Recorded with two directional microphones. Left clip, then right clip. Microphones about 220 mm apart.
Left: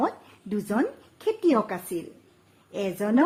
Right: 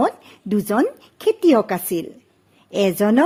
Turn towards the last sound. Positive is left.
turn(degrees=-40)  # may be behind; listen again after turning